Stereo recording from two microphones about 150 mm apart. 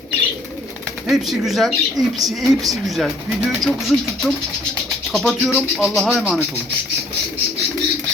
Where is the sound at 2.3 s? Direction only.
Centre (ahead or behind).